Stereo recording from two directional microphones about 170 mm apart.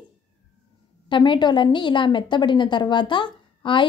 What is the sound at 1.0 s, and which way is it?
A woman's voice, 30° left (ahead or behind).